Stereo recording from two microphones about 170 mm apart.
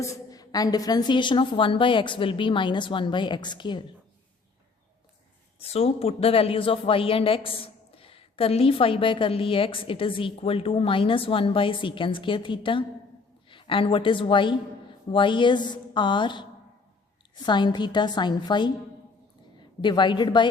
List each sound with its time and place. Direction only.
0.0 s a woman's voice: 20° left (ahead or behind)
5.5 s a woman's voice: 35° left (ahead or behind)